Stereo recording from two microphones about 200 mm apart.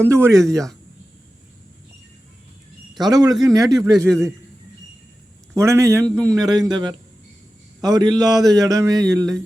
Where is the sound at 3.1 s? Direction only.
20° right (ahead or behind).